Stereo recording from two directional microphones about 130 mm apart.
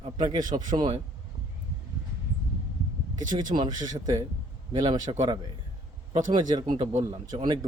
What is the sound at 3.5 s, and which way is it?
Speech, 65° right (ahead or behind).